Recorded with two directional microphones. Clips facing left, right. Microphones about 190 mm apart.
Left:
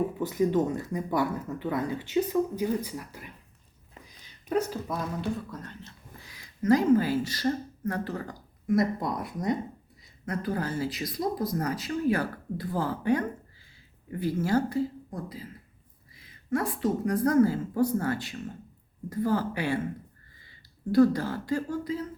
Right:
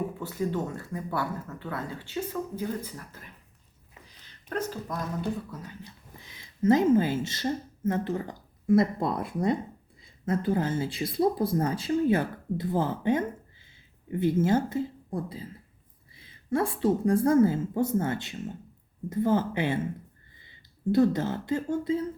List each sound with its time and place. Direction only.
0.2 s speech: 15° left (ahead or behind)
5.5 s speech: 10° right (ahead or behind)
6.1 s a woman's voice: 20° right (ahead or behind)